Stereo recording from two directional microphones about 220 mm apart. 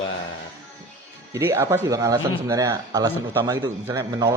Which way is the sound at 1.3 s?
10° right (ahead or behind).